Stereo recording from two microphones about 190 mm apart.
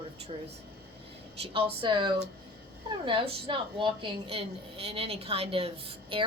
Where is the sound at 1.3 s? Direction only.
30° right (ahead or behind).